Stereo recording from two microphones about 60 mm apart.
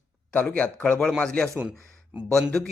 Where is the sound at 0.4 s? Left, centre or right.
Left.